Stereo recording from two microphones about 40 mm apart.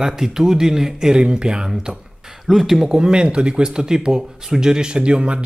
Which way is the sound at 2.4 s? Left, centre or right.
Centre.